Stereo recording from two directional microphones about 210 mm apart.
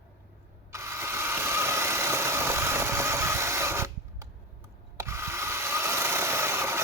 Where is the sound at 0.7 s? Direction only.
15° right (ahead or behind).